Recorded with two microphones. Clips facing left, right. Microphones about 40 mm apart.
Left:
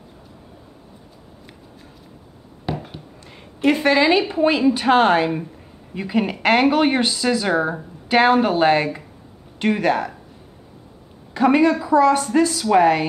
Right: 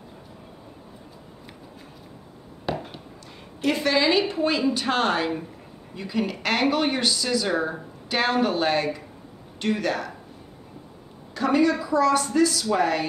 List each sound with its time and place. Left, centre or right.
2.6 s a sound: centre
3.6 s speech: left
11.3 s speech: left